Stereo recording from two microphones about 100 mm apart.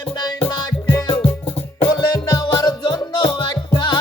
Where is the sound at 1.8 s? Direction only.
50° left (ahead or behind).